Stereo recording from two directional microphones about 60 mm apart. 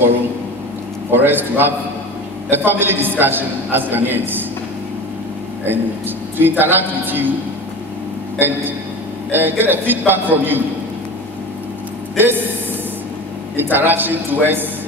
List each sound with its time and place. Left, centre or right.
1.1 s a man's voice: right
5.7 s a man's voice: right
8.4 s a man's voice: right
13.6 s a man's voice: right